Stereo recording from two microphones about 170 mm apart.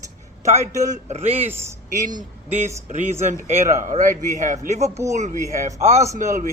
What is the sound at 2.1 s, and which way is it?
A man's voice, 45° right (ahead or behind).